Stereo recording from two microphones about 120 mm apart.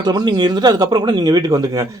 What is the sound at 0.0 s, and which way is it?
A man's voice, 35° right (ahead or behind).